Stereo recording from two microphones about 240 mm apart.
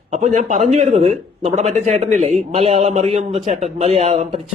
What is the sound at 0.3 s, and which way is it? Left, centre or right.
Speech, right.